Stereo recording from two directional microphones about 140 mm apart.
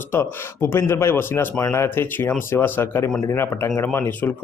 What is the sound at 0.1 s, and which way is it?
Speech, 15° left (ahead or behind).